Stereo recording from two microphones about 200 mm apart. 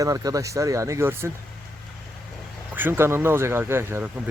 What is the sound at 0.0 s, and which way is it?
Speech, 20° right (ahead or behind).